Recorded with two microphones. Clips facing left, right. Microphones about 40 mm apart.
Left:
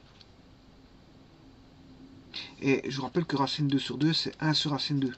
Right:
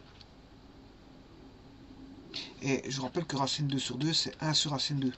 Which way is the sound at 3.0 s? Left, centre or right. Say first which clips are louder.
Left 4 dB; centre.